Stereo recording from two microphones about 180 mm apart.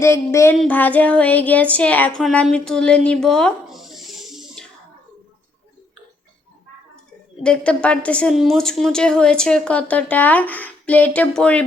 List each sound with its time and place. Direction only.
0.0 s a woman's voice: 15° left (ahead or behind)
7.4 s a woman's voice: 5° left (ahead or behind)